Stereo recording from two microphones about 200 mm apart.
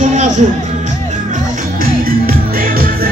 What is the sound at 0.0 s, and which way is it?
Music, 40° right (ahead or behind).